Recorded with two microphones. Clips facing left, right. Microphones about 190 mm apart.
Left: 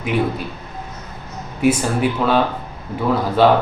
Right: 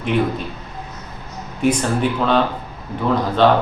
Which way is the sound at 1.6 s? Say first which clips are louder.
Left 1 dB; 5° left (ahead or behind).